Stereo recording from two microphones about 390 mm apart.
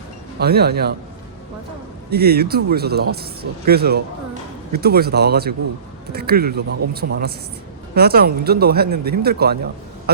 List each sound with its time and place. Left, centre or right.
0.3 s speech: right
2.0 s speech: right